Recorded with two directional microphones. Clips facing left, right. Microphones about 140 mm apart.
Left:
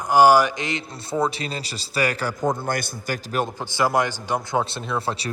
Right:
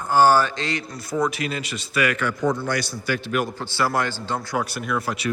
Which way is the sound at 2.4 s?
50° left (ahead or behind).